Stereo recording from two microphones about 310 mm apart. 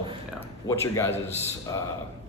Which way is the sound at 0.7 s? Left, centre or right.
Centre.